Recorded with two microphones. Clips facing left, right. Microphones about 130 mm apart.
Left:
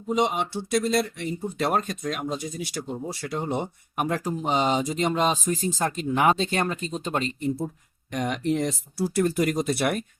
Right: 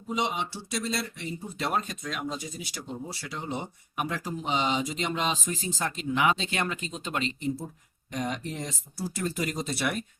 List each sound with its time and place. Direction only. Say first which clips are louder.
0.1 s speech: left 6 dB; 50° left (ahead or behind)
8.1 s speech: left 7 dB; 80° left; by 10.0 s 55° left (ahead or behind)